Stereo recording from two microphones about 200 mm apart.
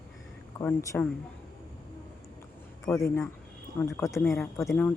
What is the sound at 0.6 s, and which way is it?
Speech, 10° left (ahead or behind).